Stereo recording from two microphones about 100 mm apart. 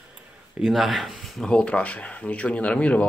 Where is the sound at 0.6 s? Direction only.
Centre (ahead or behind).